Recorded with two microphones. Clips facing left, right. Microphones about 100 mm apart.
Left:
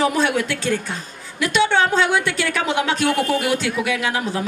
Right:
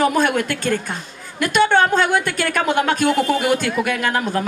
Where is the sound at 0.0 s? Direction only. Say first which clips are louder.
Right 2 dB; 50° right (ahead or behind).